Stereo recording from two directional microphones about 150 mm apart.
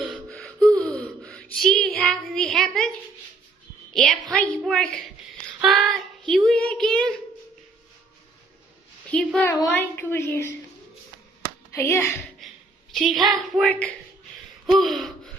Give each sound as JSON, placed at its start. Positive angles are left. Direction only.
{"t": 0.0, "sound": "a sound", "side_deg": 0}
{"t": 3.9, "sound": "child singing", "side_deg": 5}
{"t": 9.1, "sound": "child singing", "side_deg": 5}
{"t": 9.5, "sound": "a woman's voice", "side_deg": 20}
{"t": 11.7, "sound": "a child's voice", "side_deg": 15}
{"t": 12.9, "sound": "child singing", "side_deg": 0}